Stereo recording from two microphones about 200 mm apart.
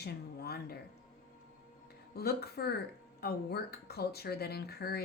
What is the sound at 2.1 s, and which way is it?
Speech, 50° left (ahead or behind).